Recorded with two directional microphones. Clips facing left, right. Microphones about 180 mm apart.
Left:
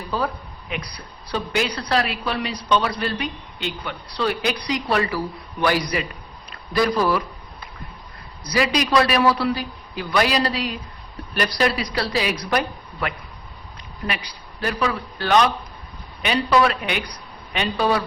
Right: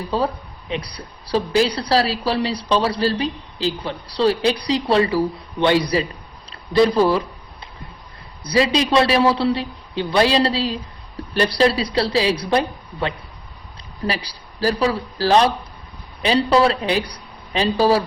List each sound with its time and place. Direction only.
0.7 s a woman's voice: 30° right (ahead or behind)
6.5 s a sound: 30° right (ahead or behind)
8.4 s a woman's voice: 25° right (ahead or behind)